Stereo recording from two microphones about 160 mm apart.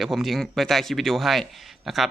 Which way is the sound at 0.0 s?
Centre (ahead or behind).